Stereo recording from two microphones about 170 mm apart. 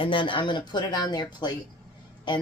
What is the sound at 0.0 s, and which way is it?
Speech, 30° left (ahead or behind).